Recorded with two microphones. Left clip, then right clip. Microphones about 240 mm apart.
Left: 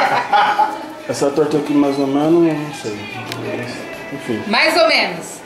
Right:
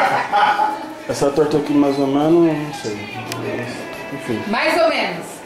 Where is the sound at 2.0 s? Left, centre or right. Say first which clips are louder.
Even; left.